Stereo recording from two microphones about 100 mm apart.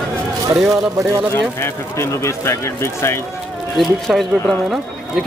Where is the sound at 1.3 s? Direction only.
25° left (ahead or behind).